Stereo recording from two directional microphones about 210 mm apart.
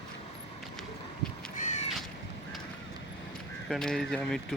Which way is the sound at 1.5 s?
35° left (ahead or behind).